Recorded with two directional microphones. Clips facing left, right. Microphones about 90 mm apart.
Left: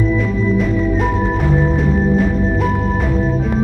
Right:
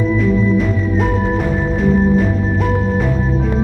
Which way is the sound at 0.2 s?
Centre (ahead or behind).